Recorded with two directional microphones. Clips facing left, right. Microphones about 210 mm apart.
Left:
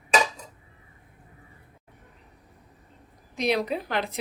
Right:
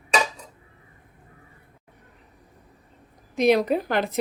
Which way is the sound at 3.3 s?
50° right (ahead or behind).